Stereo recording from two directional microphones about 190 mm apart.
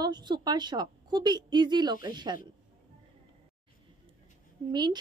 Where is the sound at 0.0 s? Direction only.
20° right (ahead or behind).